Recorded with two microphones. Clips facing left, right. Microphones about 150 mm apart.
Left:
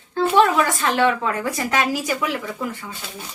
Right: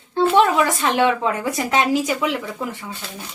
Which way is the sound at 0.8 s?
25° right (ahead or behind).